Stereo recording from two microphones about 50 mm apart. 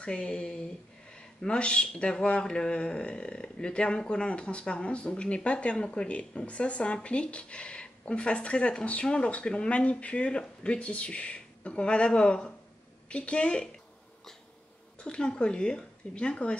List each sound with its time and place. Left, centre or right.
0.0 s speech: centre
15.0 s speech: centre